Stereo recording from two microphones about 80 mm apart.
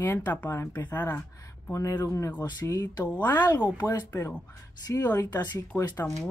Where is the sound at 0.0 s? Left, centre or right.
Left.